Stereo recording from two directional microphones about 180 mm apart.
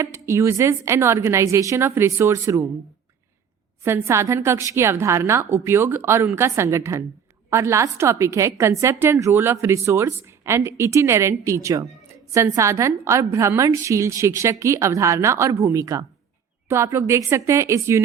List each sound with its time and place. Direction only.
0.0 s a woman's voice: 15° right (ahead or behind)
3.8 s a woman's voice: 15° right (ahead or behind)